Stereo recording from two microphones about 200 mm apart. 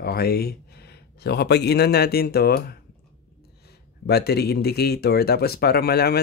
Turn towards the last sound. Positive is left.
turn(degrees=50)  # may be behind; listen again after turning